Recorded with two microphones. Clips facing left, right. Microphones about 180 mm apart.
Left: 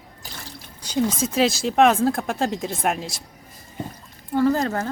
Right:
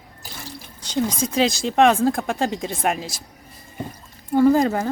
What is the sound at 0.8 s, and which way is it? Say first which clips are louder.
Speech: left 1 dB; 5° left (ahead or behind).